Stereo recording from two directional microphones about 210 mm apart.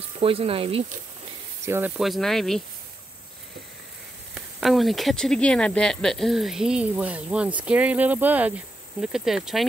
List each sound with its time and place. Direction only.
0.2 s speech: 25° right (ahead or behind)
1.7 s speech: 5° right (ahead or behind)
4.6 s speech: centre (ahead or behind)